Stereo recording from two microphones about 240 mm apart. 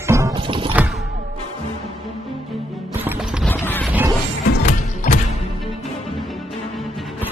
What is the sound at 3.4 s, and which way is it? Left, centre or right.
Clip-clop, centre.